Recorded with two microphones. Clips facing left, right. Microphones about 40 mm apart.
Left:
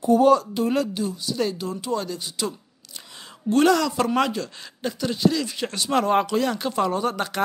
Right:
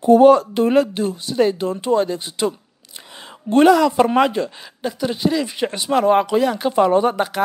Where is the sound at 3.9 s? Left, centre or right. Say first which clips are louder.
Right 7 dB; right.